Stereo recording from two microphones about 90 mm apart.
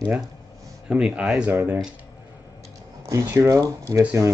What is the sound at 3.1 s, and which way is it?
Speech, 35° right (ahead or behind).